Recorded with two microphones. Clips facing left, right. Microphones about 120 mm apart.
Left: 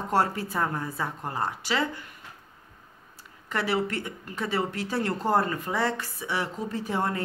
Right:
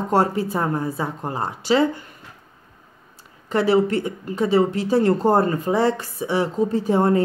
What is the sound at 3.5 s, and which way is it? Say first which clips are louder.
Speech: right 10 dB; 25° right (ahead or behind).